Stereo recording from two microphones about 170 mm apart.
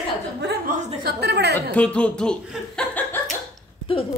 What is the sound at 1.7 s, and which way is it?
Speech, 5° left (ahead or behind).